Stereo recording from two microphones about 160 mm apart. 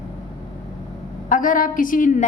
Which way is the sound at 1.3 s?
55° left (ahead or behind).